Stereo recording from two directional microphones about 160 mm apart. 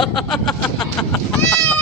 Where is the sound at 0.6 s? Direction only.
20° left (ahead or behind).